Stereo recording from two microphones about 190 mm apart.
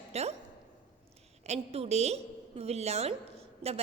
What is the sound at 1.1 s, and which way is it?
A woman's voice, 35° right (ahead or behind).